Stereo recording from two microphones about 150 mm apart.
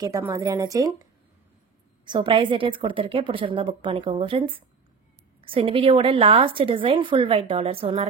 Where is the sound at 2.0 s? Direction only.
35° right (ahead or behind).